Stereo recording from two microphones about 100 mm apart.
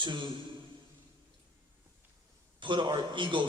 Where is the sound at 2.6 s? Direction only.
55° right (ahead or behind).